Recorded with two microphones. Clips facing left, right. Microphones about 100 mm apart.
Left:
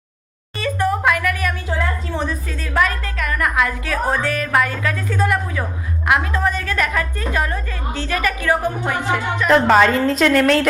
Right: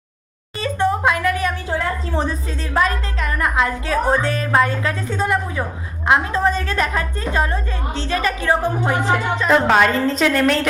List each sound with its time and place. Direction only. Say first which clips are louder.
0.6 s a sound: even; 25° right (ahead or behind)
2.1 s a woman's voice: right 2 dB; 30° right (ahead or behind)
9.6 s a woman's voice: left 2 dB; centre (ahead or behind)